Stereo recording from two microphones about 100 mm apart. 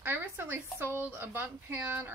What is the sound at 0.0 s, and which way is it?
Speech, 20° right (ahead or behind).